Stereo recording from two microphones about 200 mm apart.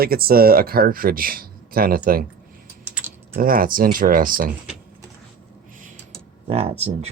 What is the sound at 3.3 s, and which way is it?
Speech, 45° right (ahead or behind).